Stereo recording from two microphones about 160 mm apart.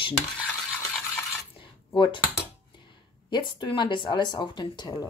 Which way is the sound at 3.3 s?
30° left (ahead or behind).